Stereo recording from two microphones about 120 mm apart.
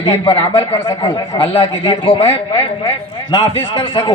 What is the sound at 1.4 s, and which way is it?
Speech, 55° left (ahead or behind).